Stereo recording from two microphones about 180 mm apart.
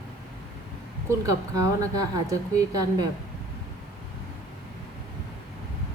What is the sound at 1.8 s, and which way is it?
A woman's voice, 20° right (ahead or behind).